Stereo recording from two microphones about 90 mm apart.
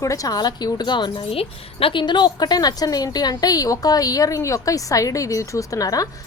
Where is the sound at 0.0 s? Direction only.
40° left (ahead or behind).